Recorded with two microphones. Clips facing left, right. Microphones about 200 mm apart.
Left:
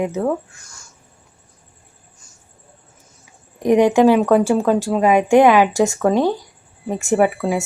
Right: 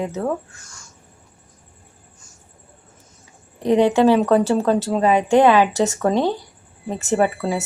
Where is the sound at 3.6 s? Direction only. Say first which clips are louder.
Left 2 dB; 15° left (ahead or behind).